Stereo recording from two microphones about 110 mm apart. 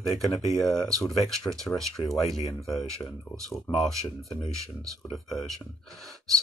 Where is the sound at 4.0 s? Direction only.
30° right (ahead or behind).